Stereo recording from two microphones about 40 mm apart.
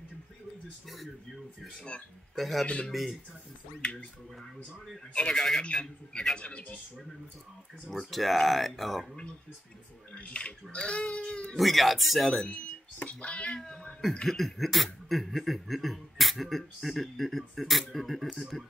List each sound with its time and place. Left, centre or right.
2.3 s speech: centre
2.6 s speech: left
2.9 s chuckle: centre
3.8 s speech: left
5.3 s speech: centre
7.9 s chuckle: centre
10.1 s speech: left
11.5 s chuckle: centre
12.4 s speech: left
13.6 s speech: centre
14.2 s chuckle: centre